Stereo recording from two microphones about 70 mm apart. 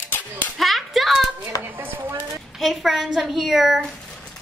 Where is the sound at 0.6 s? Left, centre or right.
Centre.